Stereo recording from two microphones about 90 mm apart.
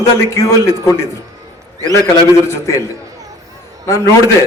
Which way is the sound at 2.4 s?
30° left (ahead or behind).